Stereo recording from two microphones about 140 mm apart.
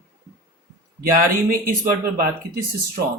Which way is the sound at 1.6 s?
80° right.